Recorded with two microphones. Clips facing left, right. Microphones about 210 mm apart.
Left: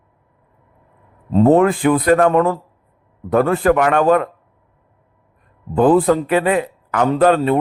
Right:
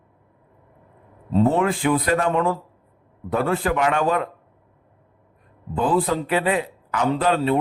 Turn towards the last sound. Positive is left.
turn(degrees=50)  # may be behind; listen again after turning